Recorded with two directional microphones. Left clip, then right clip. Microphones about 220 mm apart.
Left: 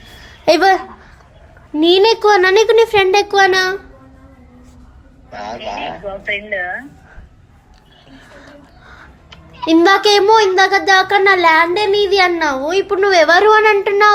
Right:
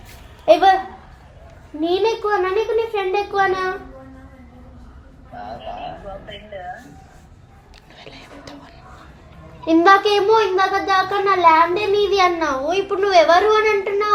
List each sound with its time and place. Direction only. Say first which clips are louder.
0.4 s speech: left 1 dB; 30° left (ahead or behind)
1.8 s a child's voice: left 8 dB; 30° left (ahead or behind)
6.0 s a sound: left 8 dB; 60° left (ahead or behind)
9.6 s a child's voice: left 3 dB; 25° left (ahead or behind)